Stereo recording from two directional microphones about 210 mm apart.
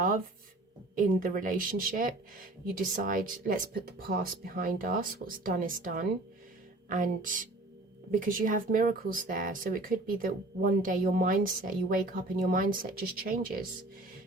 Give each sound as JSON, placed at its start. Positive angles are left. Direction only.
{"t": 1.2, "sound": "speech", "side_deg": -40}